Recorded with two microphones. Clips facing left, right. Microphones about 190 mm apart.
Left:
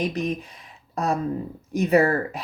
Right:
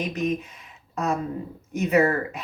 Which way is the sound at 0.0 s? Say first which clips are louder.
Even; 35° left (ahead or behind).